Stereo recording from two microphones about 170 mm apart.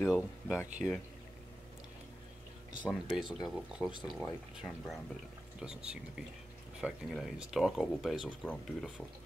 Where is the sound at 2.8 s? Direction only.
Centre (ahead or behind).